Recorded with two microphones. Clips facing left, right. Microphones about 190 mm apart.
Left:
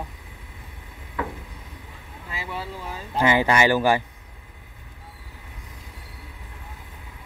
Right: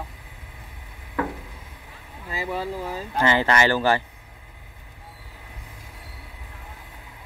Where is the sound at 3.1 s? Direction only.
15° left (ahead or behind).